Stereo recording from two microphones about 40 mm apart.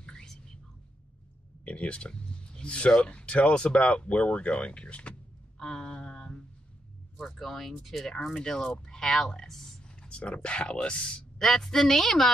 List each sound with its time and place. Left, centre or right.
1.6 s speech: left
5.6 s a sound: centre
7.2 s a woman's voice: centre
8.4 s speech: left
9.5 s a woman's voice: centre
9.8 s speech: left
11.3 s a woman's voice: centre